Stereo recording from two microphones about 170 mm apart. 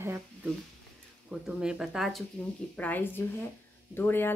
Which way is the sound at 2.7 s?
10° left (ahead or behind).